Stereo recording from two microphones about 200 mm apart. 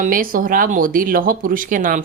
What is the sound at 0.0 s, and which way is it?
A woman's voice, 45° right (ahead or behind).